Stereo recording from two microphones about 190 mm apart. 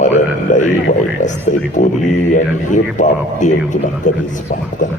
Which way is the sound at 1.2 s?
40° left (ahead or behind).